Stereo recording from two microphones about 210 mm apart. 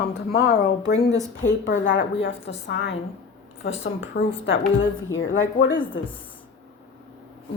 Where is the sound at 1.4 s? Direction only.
60° left (ahead or behind).